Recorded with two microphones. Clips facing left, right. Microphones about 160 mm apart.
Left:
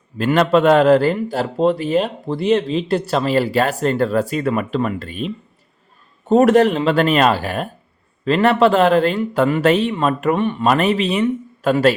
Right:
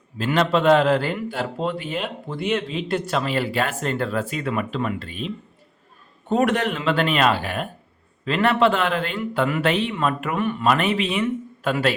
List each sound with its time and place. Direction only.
0.2 s a man's voice: 50° left (ahead or behind)
10.3 s a man's voice: 30° left (ahead or behind)